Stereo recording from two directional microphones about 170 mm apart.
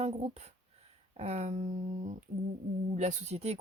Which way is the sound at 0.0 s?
40° right (ahead or behind).